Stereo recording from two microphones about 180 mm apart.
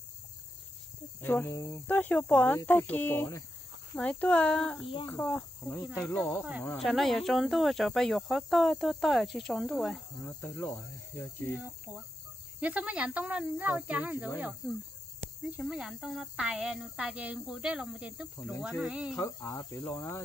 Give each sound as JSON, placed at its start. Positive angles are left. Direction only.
{"t": 1.2, "sound": "speech", "side_deg": 10}
{"t": 6.9, "sound": "cricket", "side_deg": 0}
{"t": 12.5, "sound": "speech", "side_deg": -5}
{"t": 15.5, "sound": "cricket", "side_deg": -5}
{"t": 19.1, "sound": "speech", "side_deg": 15}